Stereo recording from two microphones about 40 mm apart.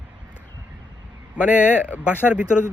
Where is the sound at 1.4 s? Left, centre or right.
Right.